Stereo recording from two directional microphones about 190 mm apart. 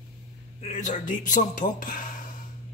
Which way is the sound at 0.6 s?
40° left (ahead or behind).